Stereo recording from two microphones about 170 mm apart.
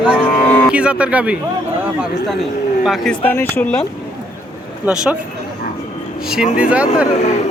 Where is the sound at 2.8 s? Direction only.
Centre (ahead or behind).